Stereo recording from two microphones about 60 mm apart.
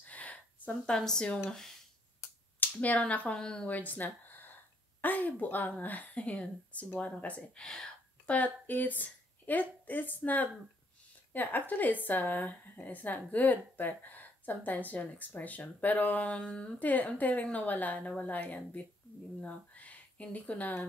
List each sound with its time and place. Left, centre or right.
0.0 s a sound: left
0.9 s speech: centre
2.6 s speech: left
3.3 s speech: centre
3.6 s a woman's voice: left
7.6 s speech: centre
8.3 s a woman's voice: left
16.8 s a woman's voice: left